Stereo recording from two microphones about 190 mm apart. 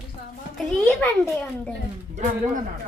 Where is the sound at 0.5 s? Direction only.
Centre (ahead or behind).